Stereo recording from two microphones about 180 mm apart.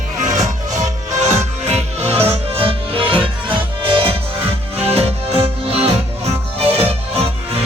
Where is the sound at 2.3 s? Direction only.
30° right (ahead or behind).